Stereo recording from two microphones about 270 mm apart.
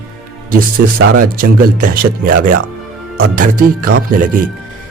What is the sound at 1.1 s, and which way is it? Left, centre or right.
Speech, right.